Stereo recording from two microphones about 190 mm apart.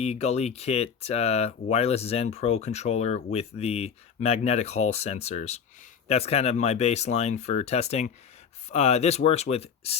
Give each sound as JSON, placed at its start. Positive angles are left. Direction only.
{"t": 0.0, "sound": "speech", "side_deg": 35}